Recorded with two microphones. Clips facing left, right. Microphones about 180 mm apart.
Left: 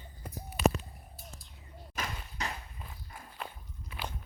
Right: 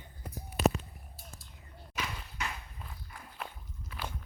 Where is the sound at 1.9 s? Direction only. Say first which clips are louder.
Even; 40° left (ahead or behind).